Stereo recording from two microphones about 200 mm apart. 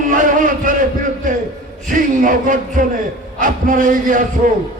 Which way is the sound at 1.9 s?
40° right (ahead or behind).